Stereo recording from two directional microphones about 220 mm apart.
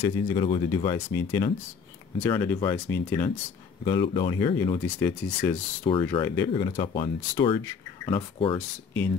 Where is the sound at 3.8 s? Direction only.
20° left (ahead or behind).